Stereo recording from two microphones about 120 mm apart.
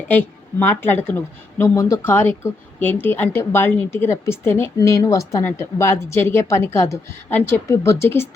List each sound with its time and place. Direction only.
0.1 s a woman's voice: 15° left (ahead or behind)